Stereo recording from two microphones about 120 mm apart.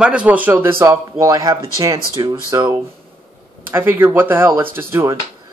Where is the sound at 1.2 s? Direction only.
30° right (ahead or behind).